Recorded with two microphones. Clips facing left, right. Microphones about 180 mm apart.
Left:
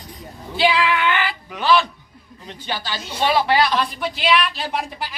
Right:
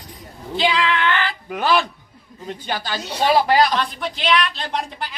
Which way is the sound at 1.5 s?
50° right (ahead or behind).